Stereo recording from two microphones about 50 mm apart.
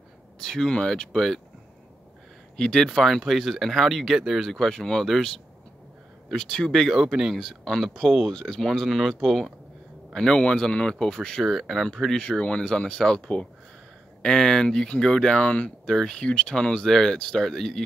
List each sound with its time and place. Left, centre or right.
0.4 s speech: centre
0.7 s speech: centre
1.1 s speech: centre
2.5 s speech: centre
6.7 s speech: centre
7.0 s speech: centre
7.3 s speech: centre
10.1 s speech: centre
11.4 s speech: centre
12.3 s speech: left
15.8 s speech: centre